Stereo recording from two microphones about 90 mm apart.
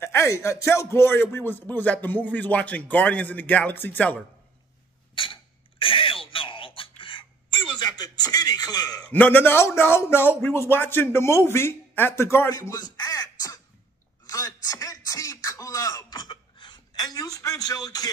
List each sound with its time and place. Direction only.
0.0 s a man's voice: 30° left (ahead or behind)
5.1 s throat clearing: 70° left (ahead or behind)
7.0 s a sound: 70° left (ahead or behind); by 9.0 s 50° left (ahead or behind)
9.0 s a man's voice: 20° left (ahead or behind)
12.4 s speech: 40° left (ahead or behind)
12.9 s crow: 50° left (ahead or behind)
14.2 s a sound: 40° left (ahead or behind)